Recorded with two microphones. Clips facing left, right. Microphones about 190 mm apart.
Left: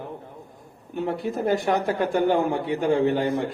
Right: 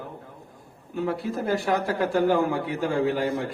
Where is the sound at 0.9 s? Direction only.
20° left (ahead or behind).